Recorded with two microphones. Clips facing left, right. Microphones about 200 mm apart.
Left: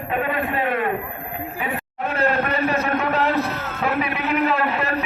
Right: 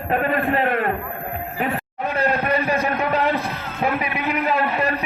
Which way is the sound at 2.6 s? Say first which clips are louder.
Even; 15° right (ahead or behind).